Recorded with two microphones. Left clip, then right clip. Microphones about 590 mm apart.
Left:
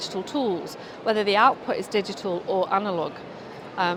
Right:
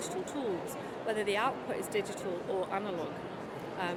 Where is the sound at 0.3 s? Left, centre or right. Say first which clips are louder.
Left 13 dB; left.